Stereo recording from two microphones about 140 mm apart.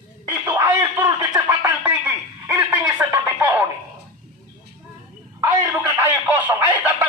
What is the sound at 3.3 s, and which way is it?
Music, 15° right (ahead or behind).